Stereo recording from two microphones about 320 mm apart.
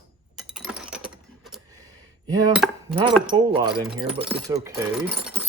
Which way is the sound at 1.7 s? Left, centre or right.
Centre.